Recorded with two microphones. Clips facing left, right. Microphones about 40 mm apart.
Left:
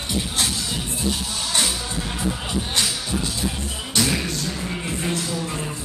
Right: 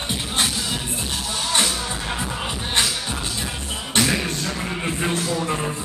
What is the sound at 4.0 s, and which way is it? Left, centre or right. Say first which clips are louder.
Music: right 2 dB; right.